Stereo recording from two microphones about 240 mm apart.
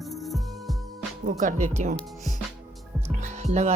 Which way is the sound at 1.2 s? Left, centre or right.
Right.